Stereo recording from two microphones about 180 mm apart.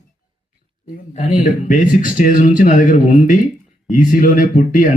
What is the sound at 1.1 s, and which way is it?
Speech, 45° left (ahead or behind).